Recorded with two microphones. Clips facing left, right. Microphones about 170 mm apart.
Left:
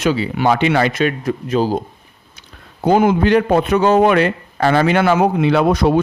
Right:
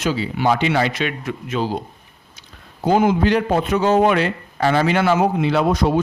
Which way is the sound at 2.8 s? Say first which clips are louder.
Left 3 dB; 60° left (ahead or behind).